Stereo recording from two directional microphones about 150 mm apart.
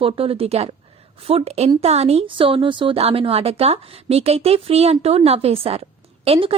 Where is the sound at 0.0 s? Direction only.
40° right (ahead or behind).